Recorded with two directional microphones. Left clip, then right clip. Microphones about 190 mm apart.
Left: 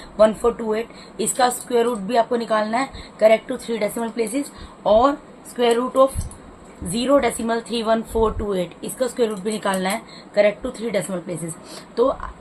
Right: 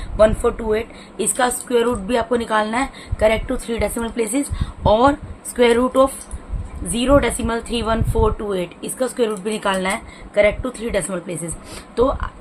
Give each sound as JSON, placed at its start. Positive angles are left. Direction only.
{"t": 0.2, "sound": "a woman's voice", "side_deg": -20}
{"t": 6.9, "sound": "a woman's voice", "side_deg": -25}